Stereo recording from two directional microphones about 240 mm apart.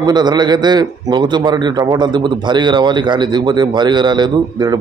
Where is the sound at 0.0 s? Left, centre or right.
Centre.